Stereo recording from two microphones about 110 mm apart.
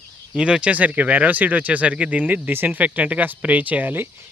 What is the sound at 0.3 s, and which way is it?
Speech, 10° right (ahead or behind).